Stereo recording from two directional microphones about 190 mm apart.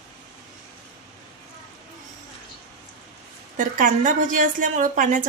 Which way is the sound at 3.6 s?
45° right (ahead or behind).